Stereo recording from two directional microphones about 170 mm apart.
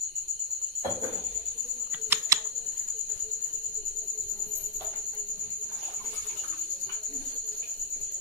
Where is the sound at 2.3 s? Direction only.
20° right (ahead or behind).